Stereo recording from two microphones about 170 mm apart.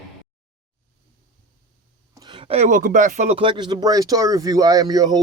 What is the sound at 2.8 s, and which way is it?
Speech, 55° right (ahead or behind).